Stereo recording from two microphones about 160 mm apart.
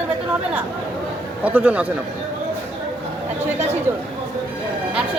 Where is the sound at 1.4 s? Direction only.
10° right (ahead or behind).